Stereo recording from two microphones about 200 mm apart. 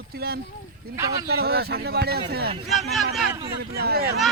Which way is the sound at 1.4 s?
55° right (ahead or behind).